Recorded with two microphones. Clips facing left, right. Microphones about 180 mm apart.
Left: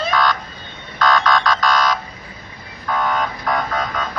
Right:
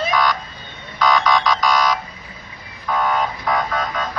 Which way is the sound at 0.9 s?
10° right (ahead or behind).